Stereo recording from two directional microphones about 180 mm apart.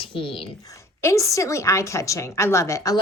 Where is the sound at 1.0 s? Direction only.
15° left (ahead or behind).